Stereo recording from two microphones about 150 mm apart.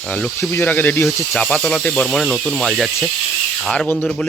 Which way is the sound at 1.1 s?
Centre (ahead or behind).